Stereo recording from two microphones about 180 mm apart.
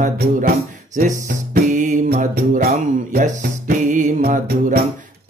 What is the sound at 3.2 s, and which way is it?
Music, 50° right (ahead or behind).